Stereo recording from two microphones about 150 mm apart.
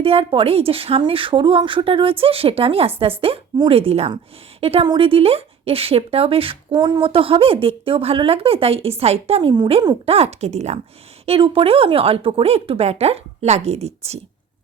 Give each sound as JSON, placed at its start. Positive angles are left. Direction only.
{"t": 0.0, "sound": "speech", "side_deg": -40}